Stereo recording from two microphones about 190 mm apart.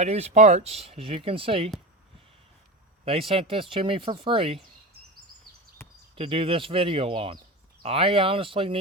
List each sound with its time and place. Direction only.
0.0 s speech: 35° right (ahead or behind)
3.0 s speech: 30° right (ahead or behind)
5.8 s a sound: 15° left (ahead or behind)
6.1 s speech: 30° right (ahead or behind)